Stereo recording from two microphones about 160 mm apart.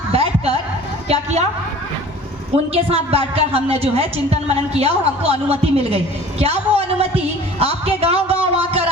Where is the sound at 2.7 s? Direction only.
40° right (ahead or behind).